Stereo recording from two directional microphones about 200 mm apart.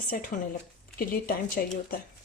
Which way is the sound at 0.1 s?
45° left (ahead or behind).